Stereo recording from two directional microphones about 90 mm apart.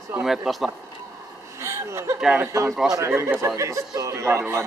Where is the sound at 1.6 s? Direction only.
30° right (ahead or behind).